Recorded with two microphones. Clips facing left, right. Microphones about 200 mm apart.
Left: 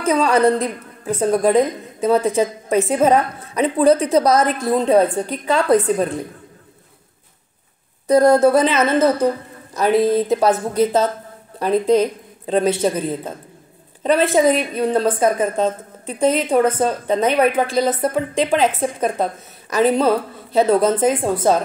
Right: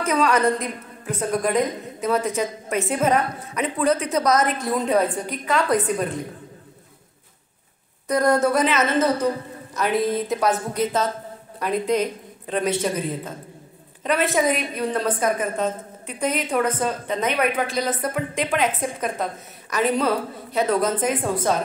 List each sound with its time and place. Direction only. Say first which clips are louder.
0.0 s a woman's voice: left 4 dB; 30° left (ahead or behind)
8.1 s a woman's voice: left 7 dB; 30° left (ahead or behind)